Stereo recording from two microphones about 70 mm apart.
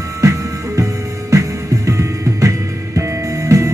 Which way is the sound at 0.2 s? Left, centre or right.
Right.